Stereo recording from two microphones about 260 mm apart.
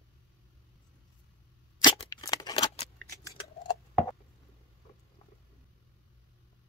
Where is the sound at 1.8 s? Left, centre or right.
Centre.